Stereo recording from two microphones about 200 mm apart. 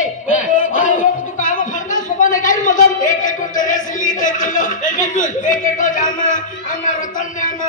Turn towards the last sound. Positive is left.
turn(degrees=40)  # may be behind; listen again after turning